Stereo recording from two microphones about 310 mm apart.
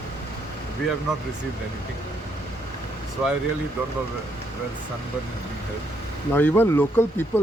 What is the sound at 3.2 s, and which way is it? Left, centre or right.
Speech, centre.